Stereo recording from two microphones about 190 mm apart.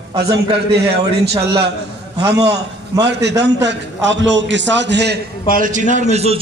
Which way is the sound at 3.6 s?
70° right (ahead or behind).